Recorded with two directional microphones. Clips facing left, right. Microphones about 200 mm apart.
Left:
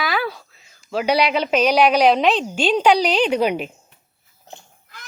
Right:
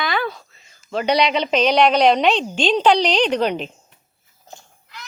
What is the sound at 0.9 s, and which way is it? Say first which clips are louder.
A woman's voice: even; 5° left (ahead or behind).